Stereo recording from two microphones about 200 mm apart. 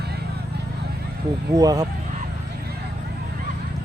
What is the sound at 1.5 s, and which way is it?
Speech, 20° right (ahead or behind).